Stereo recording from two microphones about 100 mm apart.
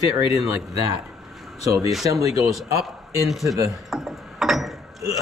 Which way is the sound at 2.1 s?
35° right (ahead or behind).